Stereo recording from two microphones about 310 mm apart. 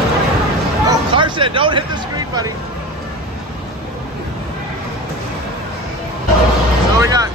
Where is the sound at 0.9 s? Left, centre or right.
Centre.